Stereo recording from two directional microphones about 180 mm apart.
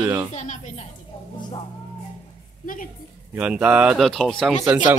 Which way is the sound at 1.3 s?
25° left (ahead or behind).